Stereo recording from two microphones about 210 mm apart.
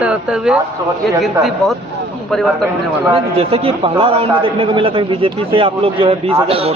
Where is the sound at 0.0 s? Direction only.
5° right (ahead or behind).